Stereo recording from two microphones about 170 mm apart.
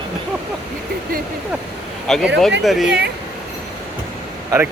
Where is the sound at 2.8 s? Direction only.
80° right.